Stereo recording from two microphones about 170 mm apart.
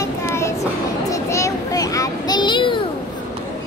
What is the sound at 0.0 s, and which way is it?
Train, 15° left (ahead or behind).